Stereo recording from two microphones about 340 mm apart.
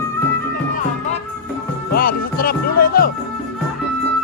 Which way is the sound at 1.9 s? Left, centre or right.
Left.